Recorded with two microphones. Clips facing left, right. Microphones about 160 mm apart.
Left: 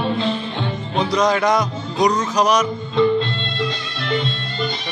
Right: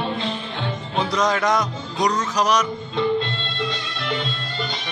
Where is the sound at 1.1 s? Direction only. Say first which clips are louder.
Left 3 dB; 5° left (ahead or behind).